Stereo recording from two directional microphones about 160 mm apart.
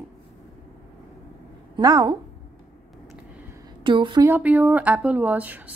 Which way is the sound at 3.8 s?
30° right (ahead or behind).